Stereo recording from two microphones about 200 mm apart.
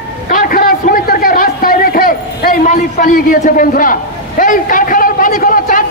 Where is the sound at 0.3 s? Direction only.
40° left (ahead or behind).